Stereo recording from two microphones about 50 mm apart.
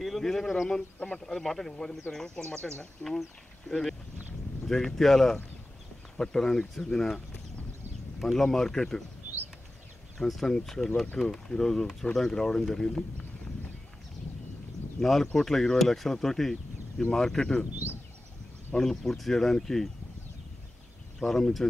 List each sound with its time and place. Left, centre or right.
0.0 s speech: centre
2.5 s speech: left
3.0 s speech: centre
8.2 s speech: centre
10.1 s speech: centre
15.0 s speech: centre
18.8 s speech: centre
21.2 s speech: centre